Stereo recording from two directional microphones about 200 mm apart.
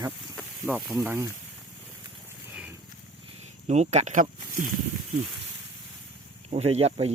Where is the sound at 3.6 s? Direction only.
35° right (ahead or behind).